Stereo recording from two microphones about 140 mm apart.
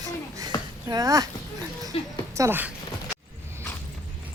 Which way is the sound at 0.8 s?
25° right (ahead or behind).